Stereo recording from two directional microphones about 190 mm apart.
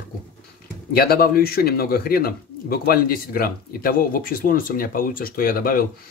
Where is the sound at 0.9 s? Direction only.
55° left (ahead or behind).